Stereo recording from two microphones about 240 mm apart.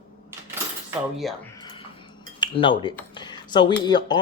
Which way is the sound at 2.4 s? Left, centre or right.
Centre.